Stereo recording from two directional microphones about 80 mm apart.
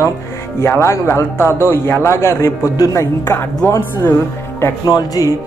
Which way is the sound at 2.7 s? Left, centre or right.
Left.